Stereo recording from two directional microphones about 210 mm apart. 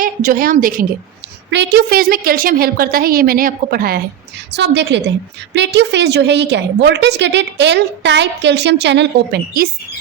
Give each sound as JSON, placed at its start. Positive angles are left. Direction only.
{"t": 0.0, "sound": "a woman's voice", "side_deg": -40}
{"t": 1.5, "sound": "a woman's voice", "side_deg": -55}
{"t": 4.5, "sound": "a woman's voice", "side_deg": -55}